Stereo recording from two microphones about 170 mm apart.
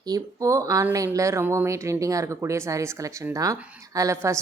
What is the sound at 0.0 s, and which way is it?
Speech, 20° right (ahead or behind).